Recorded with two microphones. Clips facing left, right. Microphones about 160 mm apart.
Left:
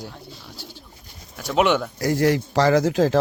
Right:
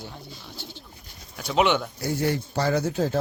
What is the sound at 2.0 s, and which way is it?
Speech, 90° left.